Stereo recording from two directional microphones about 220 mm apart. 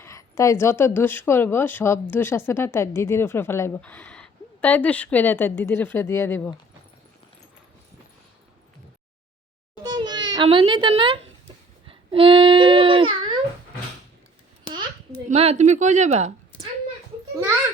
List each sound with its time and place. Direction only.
0.0 s speech: 15° left (ahead or behind)
9.8 s a sound: 20° right (ahead or behind)
10.3 s a woman's voice: 25° right (ahead or behind)
15.3 s speech: 30° right (ahead or behind)